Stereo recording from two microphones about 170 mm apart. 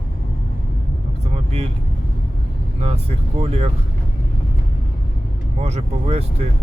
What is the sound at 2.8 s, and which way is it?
Speech, 40° right (ahead or behind).